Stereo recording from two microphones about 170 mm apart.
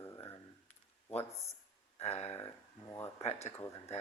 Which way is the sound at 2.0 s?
40° left (ahead or behind).